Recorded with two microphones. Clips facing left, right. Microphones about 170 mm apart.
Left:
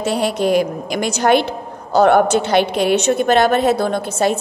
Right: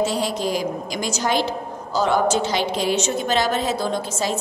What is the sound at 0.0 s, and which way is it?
A woman's voice, 60° left (ahead or behind).